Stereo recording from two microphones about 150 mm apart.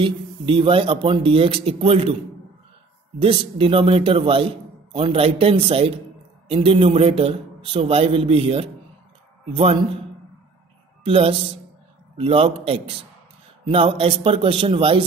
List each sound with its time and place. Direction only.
0.0 s a man's voice: 35° right (ahead or behind)
3.2 s a man's voice: 35° right (ahead or behind)
11.1 s a man's voice: 40° right (ahead or behind)